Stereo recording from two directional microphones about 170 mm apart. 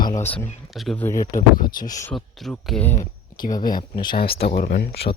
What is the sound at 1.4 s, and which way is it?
Speech, 55° left (ahead or behind).